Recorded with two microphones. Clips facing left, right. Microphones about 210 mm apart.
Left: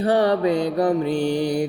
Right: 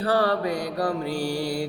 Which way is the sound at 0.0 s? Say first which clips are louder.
Left 5 dB; 20° left (ahead or behind).